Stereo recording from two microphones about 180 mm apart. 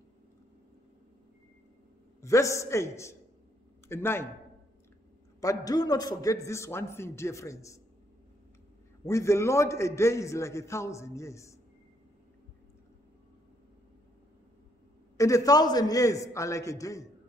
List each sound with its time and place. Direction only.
2.2 s a man's voice: 15° left (ahead or behind)
5.4 s a man's voice: 20° left (ahead or behind)
9.0 s a man's voice: 15° left (ahead or behind)
15.1 s a man's voice: 20° left (ahead or behind)